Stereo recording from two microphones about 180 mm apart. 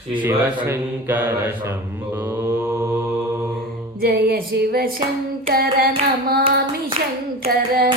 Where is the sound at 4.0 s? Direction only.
60° right (ahead or behind).